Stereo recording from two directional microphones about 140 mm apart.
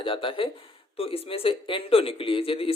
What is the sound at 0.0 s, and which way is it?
A man's voice, 40° left (ahead or behind).